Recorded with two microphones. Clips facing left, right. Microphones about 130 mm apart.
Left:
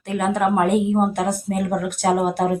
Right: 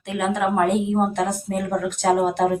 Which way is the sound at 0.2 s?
10° left (ahead or behind).